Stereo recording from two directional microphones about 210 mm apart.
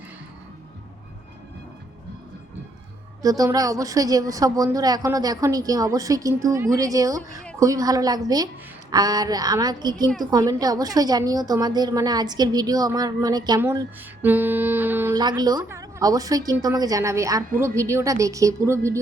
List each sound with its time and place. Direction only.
3.2 s a woman's voice: 15° right (ahead or behind)